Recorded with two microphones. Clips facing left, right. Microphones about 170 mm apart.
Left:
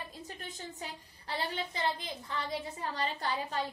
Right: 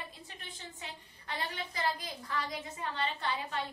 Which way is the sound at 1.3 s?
30° left (ahead or behind).